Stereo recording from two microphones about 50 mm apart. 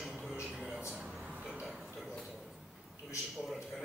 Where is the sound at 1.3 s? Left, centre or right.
Right.